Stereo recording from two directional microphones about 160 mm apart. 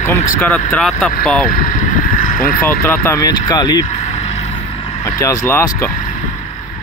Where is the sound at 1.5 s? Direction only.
55° left (ahead or behind).